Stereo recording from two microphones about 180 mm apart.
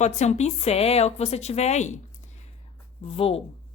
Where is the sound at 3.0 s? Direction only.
30° left (ahead or behind).